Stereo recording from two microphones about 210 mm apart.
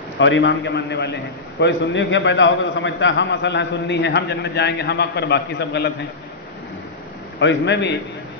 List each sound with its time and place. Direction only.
0.2 s a man's voice: 60° left (ahead or behind)
7.3 s a man's voice: 60° left (ahead or behind)